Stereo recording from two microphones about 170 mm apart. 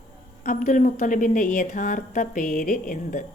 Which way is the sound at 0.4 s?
50° left (ahead or behind).